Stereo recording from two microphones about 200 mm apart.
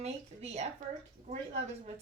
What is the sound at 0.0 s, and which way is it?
Speech, 35° right (ahead or behind).